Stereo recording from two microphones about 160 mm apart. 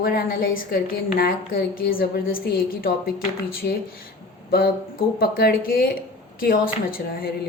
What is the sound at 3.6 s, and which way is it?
Speech, 90° left.